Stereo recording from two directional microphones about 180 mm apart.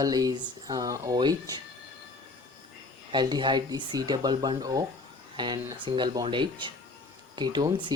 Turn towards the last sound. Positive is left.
turn(degrees=-25)  # may be behind; listen again after turning